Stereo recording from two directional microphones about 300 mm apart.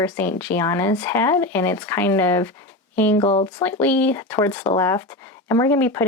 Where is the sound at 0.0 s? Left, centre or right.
Centre.